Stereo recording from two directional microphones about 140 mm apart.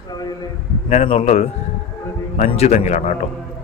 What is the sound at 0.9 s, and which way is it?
A man's voice, 45° left (ahead or behind).